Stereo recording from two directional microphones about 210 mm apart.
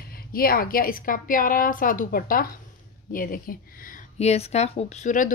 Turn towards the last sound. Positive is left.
turn(degrees=35)  # may be behind; listen again after turning